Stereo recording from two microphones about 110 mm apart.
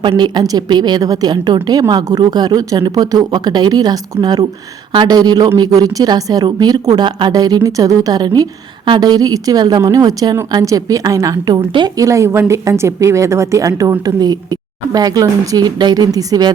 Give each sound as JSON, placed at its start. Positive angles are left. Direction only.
{"t": 0.0, "sound": "a woman's voice", "side_deg": -45}